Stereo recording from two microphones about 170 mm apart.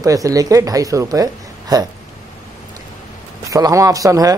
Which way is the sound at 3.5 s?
20° right (ahead or behind).